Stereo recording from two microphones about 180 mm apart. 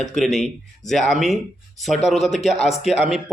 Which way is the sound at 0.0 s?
Centre (ahead or behind).